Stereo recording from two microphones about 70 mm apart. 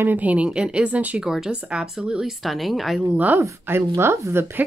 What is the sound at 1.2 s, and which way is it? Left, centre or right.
Speech, centre.